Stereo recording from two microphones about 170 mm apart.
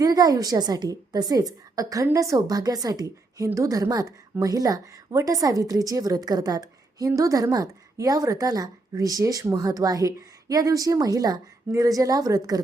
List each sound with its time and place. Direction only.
0.0 s a woman's voice: 20° right (ahead or behind)